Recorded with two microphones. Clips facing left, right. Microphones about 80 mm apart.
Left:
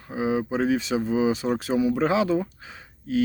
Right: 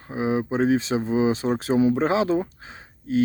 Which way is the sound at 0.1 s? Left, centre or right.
Right.